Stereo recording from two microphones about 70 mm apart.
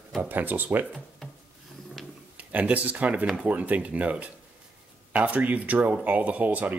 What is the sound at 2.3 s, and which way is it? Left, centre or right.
Speech, right.